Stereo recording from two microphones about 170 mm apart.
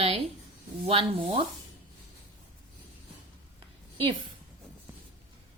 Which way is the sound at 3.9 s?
30° right (ahead or behind).